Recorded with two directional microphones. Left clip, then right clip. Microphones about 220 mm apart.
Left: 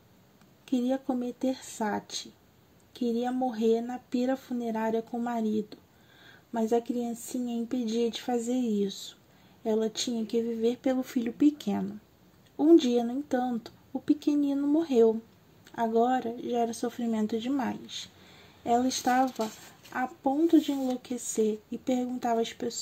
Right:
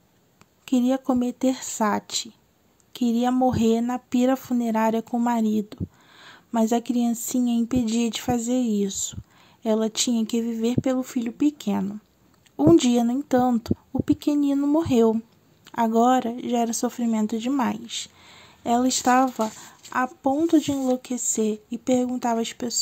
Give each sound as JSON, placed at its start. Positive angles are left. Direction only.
{"t": 0.7, "sound": "speech", "side_deg": -20}
{"t": 12.5, "sound": "speech", "side_deg": -25}